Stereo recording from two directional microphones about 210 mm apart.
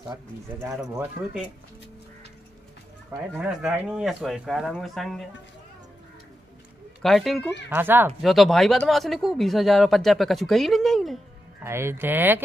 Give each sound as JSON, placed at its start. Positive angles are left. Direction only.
{"t": 3.3, "sound": "speech", "side_deg": -5}
{"t": 7.0, "sound": "speech", "side_deg": 0}
{"t": 11.6, "sound": "speech", "side_deg": -10}